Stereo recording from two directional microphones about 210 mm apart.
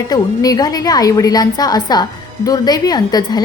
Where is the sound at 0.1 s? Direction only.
20° left (ahead or behind).